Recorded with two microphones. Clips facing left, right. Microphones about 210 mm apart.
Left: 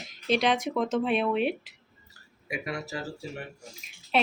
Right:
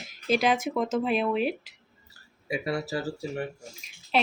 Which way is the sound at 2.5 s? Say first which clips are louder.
Right 5 dB; 30° right (ahead or behind).